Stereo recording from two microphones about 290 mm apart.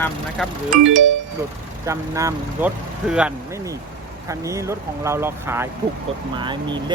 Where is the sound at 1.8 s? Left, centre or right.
Centre.